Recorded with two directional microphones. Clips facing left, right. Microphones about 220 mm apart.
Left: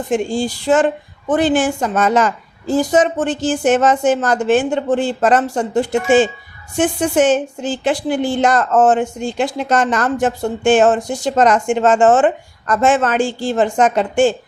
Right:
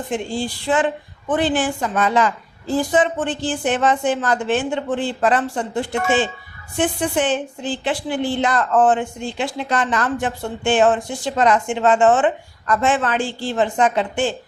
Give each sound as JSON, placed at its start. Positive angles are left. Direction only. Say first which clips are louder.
{"t": 0.1, "sound": "speech", "louder": "left 7 dB", "side_deg": 45}